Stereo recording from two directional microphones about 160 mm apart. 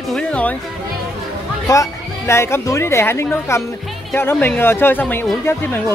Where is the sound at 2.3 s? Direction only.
15° left (ahead or behind).